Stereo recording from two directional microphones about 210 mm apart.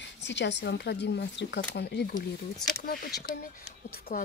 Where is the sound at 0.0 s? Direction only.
55° left (ahead or behind).